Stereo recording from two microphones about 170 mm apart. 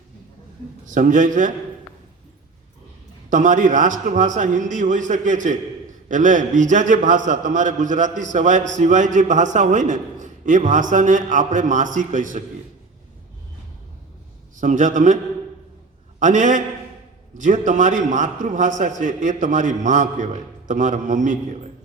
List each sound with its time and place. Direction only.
0.9 s a man's voice: 50° right (ahead or behind)
3.2 s a man's voice: 50° right (ahead or behind)
14.5 s a man's voice: 50° right (ahead or behind)
16.2 s a man's voice: 50° right (ahead or behind)